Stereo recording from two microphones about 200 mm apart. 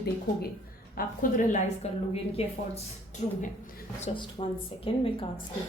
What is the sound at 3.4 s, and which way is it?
Speech, 45° left (ahead or behind).